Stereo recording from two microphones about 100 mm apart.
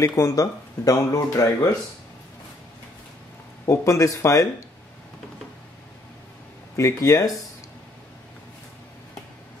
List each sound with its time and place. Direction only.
0.1 s speech: 30° left (ahead or behind)
3.6 s speech: 30° left (ahead or behind)
6.8 s speech: 35° left (ahead or behind)